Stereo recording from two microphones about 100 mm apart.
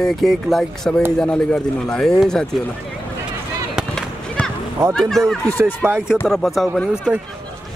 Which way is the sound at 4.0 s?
5° left (ahead or behind).